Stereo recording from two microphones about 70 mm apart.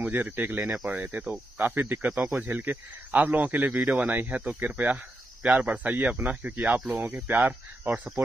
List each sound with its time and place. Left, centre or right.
0.0 s speech: right